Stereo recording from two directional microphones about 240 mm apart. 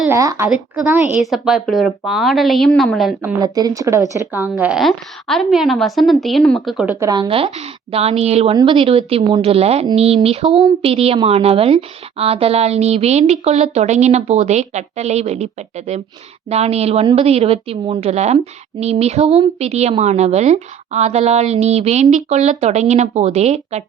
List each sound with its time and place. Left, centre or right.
0.0 s a woman's voice: centre
3.4 s a woman's voice: centre
7.0 s a woman's voice: centre